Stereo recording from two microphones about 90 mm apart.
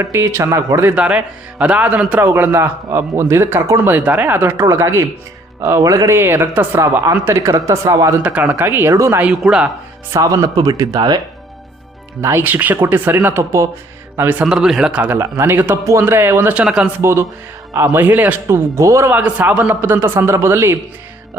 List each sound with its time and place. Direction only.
0.0 s speech: 25° right (ahead or behind)
0.9 s a man's voice: 15° right (ahead or behind)
2.2 s speech: 25° right (ahead or behind)
8.2 s speech: 20° right (ahead or behind)
9.2 s a man's voice: 10° right (ahead or behind)
10.1 s speech: 35° right (ahead or behind)
12.4 s speech: 20° right (ahead or behind)
14.4 s a man's voice: 5° right (ahead or behind)
15.2 s speech: 25° right (ahead or behind)
16.6 s a man's voice: 10° right (ahead or behind)
17.0 s speech: 30° right (ahead or behind)
17.8 s speech: 20° right (ahead or behind)
18.4 s speech: 35° right (ahead or behind)
19.1 s a man's voice: 20° right (ahead or behind)